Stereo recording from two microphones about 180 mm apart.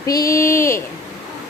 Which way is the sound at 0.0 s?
20° left (ahead or behind).